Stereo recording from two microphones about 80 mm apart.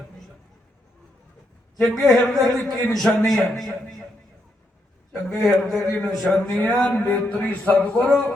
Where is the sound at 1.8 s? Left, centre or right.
Centre.